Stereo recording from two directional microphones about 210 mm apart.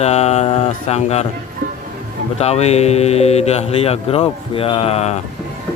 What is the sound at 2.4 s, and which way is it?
Speech, 30° left (ahead or behind).